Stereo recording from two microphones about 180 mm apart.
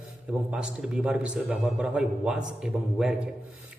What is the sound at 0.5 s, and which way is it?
A man's voice, 5° right (ahead or behind).